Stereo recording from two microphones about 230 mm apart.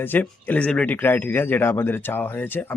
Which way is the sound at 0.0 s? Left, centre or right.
Centre.